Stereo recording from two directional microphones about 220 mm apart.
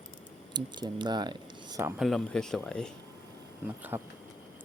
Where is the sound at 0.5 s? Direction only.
20° right (ahead or behind).